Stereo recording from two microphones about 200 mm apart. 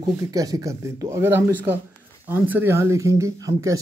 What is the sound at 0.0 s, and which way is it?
Speech, 15° right (ahead or behind).